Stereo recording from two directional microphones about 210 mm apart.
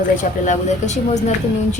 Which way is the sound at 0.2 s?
35° left (ahead or behind).